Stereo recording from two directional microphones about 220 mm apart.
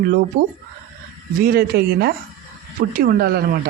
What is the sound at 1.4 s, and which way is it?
Speech, 45° right (ahead or behind).